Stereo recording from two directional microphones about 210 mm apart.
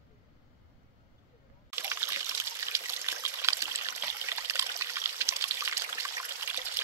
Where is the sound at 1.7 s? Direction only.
10° right (ahead or behind).